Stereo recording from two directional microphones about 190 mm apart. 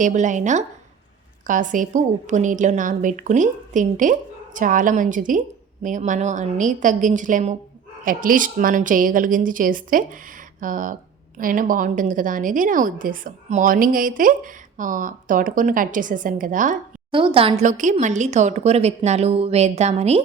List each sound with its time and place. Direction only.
0.0 s a woman's voice: 40° right (ahead or behind)
17.1 s a woman's voice: 25° right (ahead or behind)